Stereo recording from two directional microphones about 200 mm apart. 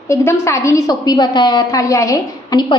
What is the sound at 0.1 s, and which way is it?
A woman's voice, 15° left (ahead or behind).